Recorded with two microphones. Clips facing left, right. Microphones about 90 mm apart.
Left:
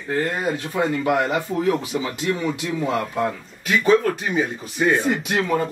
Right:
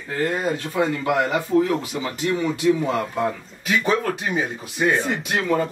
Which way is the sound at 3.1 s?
Centre (ahead or behind).